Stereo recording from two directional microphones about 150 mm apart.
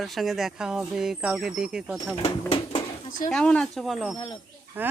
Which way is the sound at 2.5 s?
40° left (ahead or behind).